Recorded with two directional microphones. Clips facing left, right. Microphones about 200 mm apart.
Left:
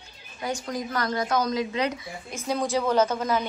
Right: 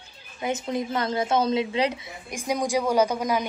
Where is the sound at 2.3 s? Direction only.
15° right (ahead or behind).